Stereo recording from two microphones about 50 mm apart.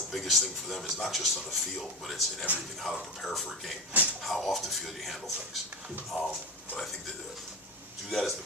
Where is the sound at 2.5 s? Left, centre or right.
Right.